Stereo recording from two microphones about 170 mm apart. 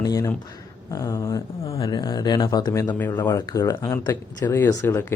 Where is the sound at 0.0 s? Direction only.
20° left (ahead or behind).